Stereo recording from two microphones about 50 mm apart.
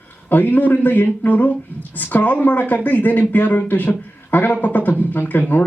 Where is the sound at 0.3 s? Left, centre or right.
Left.